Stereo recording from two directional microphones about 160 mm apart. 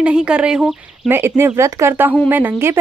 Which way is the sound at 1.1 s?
15° right (ahead or behind).